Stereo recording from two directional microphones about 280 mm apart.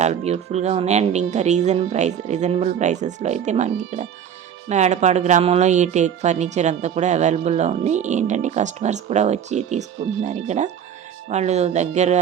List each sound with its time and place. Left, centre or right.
0.0 s speech: right